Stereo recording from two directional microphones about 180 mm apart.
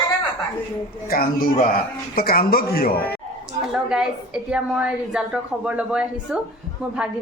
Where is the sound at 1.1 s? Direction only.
55° left (ahead or behind).